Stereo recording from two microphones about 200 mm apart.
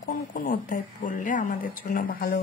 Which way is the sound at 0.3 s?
45° left (ahead or behind).